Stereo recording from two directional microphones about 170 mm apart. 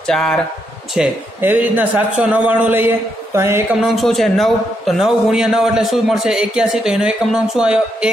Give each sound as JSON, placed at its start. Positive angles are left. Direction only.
{"t": 0.0, "sound": "speech", "side_deg": 5}
{"t": 0.9, "sound": "a man's voice", "side_deg": -10}
{"t": 3.8, "sound": "a man's voice", "side_deg": 0}